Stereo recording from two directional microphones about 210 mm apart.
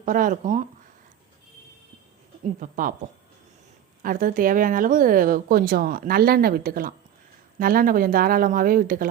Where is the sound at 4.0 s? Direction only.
40° right (ahead or behind).